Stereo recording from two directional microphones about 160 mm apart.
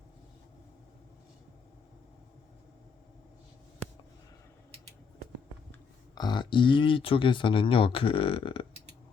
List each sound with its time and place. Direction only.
6.1 s speech: 30° left (ahead or behind)